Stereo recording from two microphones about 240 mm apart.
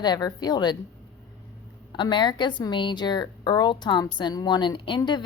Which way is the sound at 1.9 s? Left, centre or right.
Centre.